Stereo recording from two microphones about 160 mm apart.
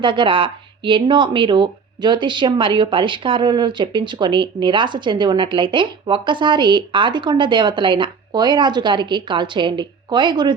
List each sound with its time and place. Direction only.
0.0 s speech: 30° right (ahead or behind)